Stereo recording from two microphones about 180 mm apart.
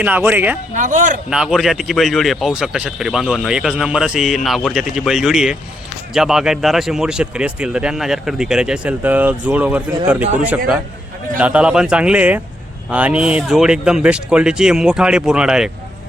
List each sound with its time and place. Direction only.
0.0 s speech: 10° right (ahead or behind)
0.8 s speech: 45° right (ahead or behind)
1.3 s speech: 5° right (ahead or behind)
11.3 s speech: 5° right (ahead or behind)